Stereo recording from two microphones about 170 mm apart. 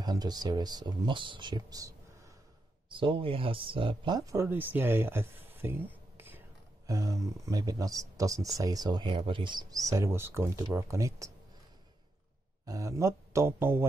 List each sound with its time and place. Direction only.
0.0 s speech: 25° right (ahead or behind)
2.9 s speech: 30° right (ahead or behind)
12.6 s speech: 20° right (ahead or behind)